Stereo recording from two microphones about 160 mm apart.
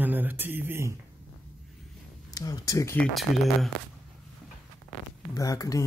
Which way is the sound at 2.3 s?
20° left (ahead or behind).